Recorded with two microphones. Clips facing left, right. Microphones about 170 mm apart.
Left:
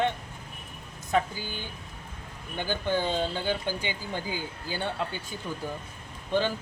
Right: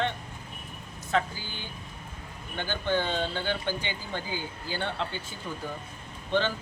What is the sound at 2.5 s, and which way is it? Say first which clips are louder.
Speech: even; 10° left (ahead or behind).